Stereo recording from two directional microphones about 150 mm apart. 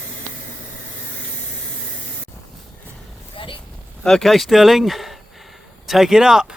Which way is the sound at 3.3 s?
35° left (ahead or behind).